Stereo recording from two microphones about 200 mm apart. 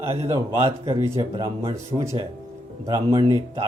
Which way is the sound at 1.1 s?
20° right (ahead or behind).